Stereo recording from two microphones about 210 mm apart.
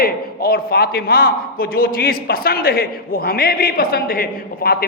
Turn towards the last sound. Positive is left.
turn(degrees=45)  # may be behind; listen again after turning